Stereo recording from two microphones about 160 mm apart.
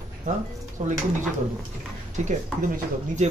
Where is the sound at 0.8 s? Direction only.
50° right (ahead or behind).